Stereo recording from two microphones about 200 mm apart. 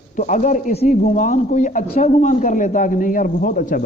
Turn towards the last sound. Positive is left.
turn(degrees=40)  # may be behind; listen again after turning